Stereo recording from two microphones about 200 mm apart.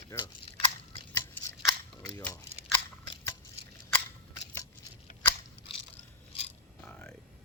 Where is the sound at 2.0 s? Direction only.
15° left (ahead or behind).